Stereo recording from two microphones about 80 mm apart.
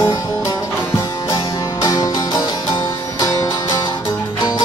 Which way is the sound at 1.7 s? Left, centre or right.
Left.